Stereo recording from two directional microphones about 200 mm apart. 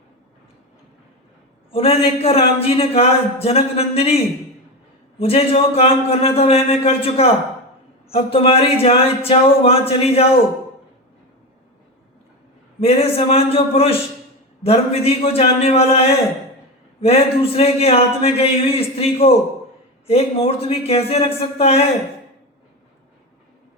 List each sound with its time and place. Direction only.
1.7 s speech: 30° left (ahead or behind)
5.2 s speech: 30° left (ahead or behind)
12.8 s speech: 30° left (ahead or behind)